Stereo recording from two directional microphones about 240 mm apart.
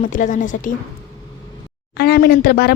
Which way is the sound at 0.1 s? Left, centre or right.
Left.